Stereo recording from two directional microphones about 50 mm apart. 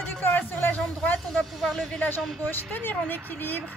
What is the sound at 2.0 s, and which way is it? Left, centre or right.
Speech, left.